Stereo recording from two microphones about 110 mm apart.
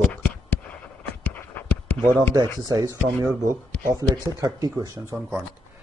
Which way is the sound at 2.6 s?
35° right (ahead or behind).